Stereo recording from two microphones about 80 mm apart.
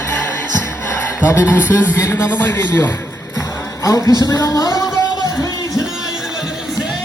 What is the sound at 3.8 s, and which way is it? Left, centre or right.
Speech, left.